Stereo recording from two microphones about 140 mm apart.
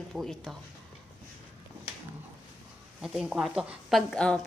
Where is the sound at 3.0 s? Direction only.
5° right (ahead or behind).